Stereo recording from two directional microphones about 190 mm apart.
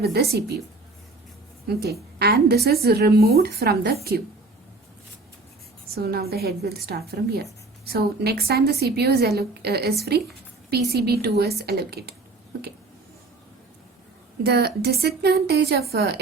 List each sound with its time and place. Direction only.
0.0 s a woman's voice: 55° right (ahead or behind)
1.8 s a woman's voice: 55° right (ahead or behind)
5.9 s a woman's voice: 55° right (ahead or behind)
14.4 s a woman's voice: 60° right (ahead or behind)